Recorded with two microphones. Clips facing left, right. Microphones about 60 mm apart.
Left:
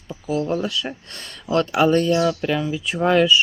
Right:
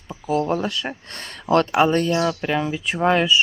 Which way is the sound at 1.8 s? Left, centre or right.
Right.